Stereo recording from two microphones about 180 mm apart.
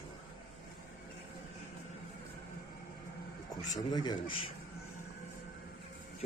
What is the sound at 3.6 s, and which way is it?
Speech, 20° left (ahead or behind).